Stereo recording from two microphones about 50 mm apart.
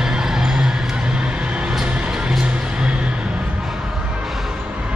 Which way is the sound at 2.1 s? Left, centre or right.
Centre.